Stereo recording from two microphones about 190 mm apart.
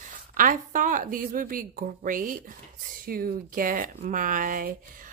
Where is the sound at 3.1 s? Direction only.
50° right (ahead or behind).